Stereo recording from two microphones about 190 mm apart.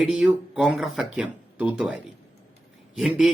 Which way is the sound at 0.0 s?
5° right (ahead or behind).